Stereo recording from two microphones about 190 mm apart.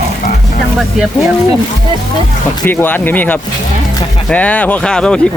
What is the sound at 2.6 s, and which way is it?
Speech, 10° left (ahead or behind).